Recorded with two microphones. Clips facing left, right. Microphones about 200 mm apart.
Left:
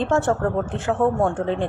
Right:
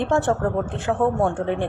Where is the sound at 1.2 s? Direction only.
15° right (ahead or behind).